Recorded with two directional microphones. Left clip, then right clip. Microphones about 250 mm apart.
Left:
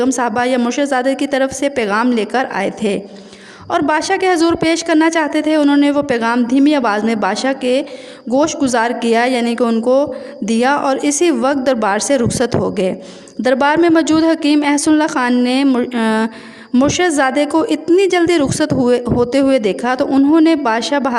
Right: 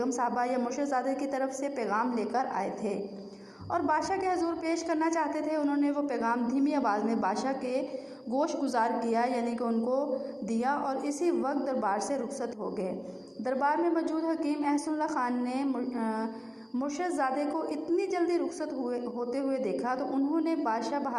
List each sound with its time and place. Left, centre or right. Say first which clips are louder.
0.0 s a woman's voice: left 14 dB; left